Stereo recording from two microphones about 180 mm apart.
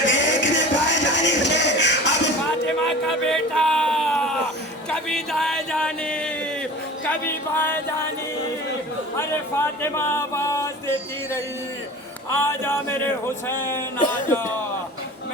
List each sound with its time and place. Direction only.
0.0 s music: 85° left
2.8 s a sound: 5° left (ahead or behind)
7.1 s music: 10° left (ahead or behind)
9.1 s music: 15° left (ahead or behind)